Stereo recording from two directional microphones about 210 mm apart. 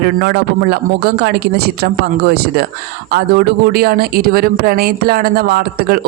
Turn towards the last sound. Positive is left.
turn(degrees=-45)  # may be behind; listen again after turning